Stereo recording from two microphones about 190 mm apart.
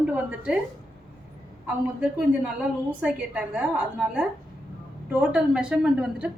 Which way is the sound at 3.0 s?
5° right (ahead or behind).